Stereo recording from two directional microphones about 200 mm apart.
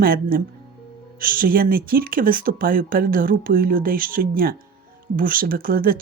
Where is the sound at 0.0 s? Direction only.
45° right (ahead or behind).